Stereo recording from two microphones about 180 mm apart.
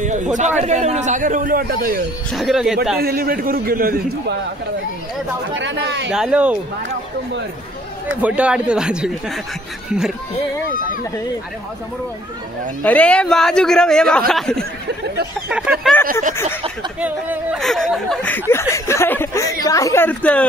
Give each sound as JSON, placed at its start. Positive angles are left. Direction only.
{"t": 0.0, "sound": "a man's voice", "side_deg": -40}
{"t": 2.3, "sound": "a man's voice", "side_deg": 0}
{"t": 3.0, "sound": "a man's voice", "side_deg": -55}
{"t": 5.6, "sound": "speech", "side_deg": -80}
{"t": 6.0, "sound": "speech", "side_deg": -5}
{"t": 8.2, "sound": "a man's voice", "side_deg": -5}
{"t": 12.8, "sound": "a man's voice", "side_deg": 5}
{"t": 17.0, "sound": "a man's voice", "side_deg": -5}